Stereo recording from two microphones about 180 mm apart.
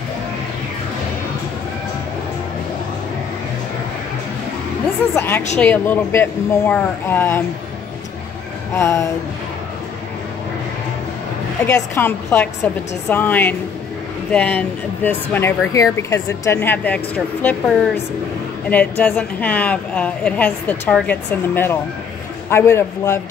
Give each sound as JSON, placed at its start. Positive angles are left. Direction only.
{"t": 5.1, "sound": "speech", "side_deg": 15}
{"t": 8.7, "sound": "speech", "side_deg": 15}
{"t": 11.6, "sound": "speech", "side_deg": 15}
{"t": 18.7, "sound": "speech", "side_deg": 10}